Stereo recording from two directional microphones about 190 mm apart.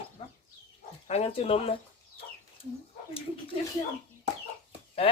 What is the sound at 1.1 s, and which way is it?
Speech, 30° left (ahead or behind).